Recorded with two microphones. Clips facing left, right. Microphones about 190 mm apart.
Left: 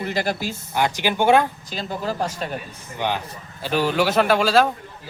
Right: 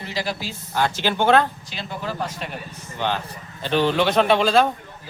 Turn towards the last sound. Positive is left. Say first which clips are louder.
# even
turn(degrees=5)  # may be behind; listen again after turning